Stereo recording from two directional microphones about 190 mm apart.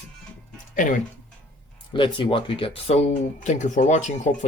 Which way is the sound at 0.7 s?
45° left (ahead or behind).